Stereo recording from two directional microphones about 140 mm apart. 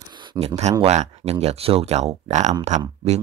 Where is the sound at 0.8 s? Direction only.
50° right (ahead or behind).